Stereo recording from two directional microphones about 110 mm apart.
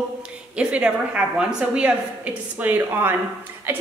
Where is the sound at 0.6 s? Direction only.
10° right (ahead or behind).